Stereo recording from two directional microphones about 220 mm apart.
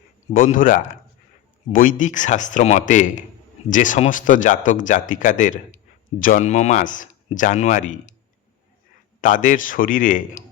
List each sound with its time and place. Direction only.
0.3 s speech: 35° left (ahead or behind)
9.2 s speech: 35° left (ahead or behind)